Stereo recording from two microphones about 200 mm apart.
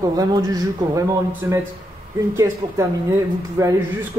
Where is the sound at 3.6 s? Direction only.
15° right (ahead or behind).